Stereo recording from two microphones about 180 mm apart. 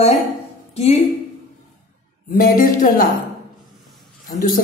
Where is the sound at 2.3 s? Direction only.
50° left (ahead or behind).